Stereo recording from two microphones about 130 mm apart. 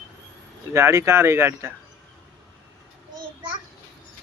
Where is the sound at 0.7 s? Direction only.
20° right (ahead or behind).